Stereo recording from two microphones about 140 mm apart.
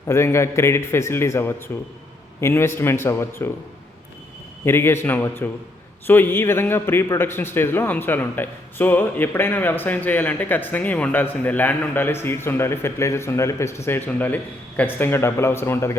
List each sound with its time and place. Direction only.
0.1 s a man's voice: 20° left (ahead or behind)
4.6 s a man's voice: 15° left (ahead or behind)